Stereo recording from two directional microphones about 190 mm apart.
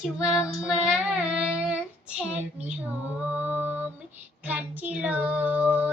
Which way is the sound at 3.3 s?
10° right (ahead or behind).